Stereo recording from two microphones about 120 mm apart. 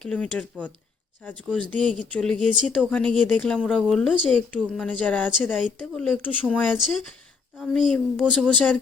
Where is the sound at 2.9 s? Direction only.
10° left (ahead or behind).